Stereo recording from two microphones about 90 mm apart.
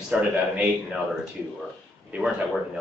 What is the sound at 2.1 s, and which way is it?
Speech, 15° right (ahead or behind).